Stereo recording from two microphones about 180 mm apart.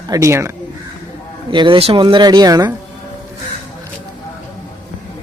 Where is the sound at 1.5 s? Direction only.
25° right (ahead or behind).